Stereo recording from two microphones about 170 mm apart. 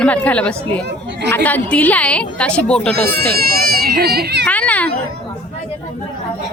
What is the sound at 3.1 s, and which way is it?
Speech, 60° right (ahead or behind).